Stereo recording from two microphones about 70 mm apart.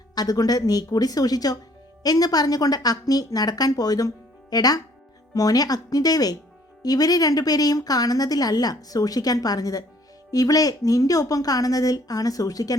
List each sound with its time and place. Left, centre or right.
0.1 s a woman's voice: left